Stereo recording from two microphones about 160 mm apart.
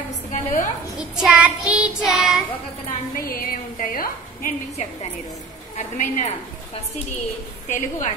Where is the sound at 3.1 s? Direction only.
65° left (ahead or behind).